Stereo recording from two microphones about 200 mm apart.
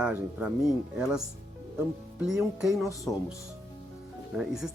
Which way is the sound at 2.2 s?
5° right (ahead or behind).